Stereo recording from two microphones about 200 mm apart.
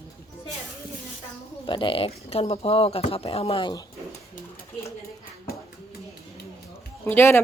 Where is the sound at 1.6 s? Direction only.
25° left (ahead or behind).